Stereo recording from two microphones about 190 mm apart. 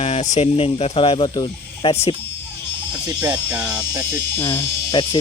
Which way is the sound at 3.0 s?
10° right (ahead or behind).